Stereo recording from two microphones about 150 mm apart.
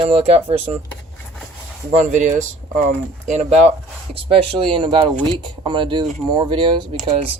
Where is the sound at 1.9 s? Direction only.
55° right (ahead or behind).